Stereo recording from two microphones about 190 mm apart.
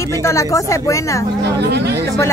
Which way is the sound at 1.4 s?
60° right (ahead or behind).